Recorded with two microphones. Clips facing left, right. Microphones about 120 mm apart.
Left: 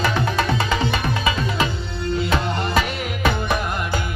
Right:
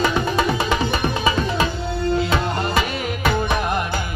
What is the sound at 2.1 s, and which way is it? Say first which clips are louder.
Music: even; 45° right (ahead or behind).